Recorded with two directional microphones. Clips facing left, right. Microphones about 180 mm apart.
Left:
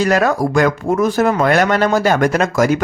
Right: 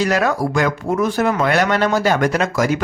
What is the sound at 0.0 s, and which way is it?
Speech, 45° left (ahead or behind).